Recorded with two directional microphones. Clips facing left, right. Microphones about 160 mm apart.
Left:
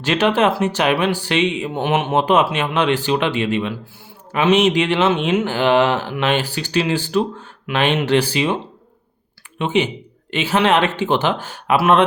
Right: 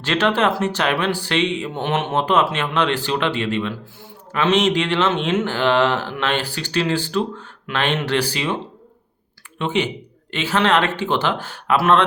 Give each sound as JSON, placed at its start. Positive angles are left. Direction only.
{"t": 0.0, "sound": "speech", "side_deg": 15}
{"t": 9.6, "sound": "speech", "side_deg": 15}